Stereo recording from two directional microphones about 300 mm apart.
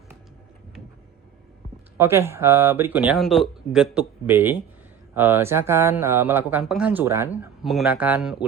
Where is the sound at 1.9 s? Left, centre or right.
Centre.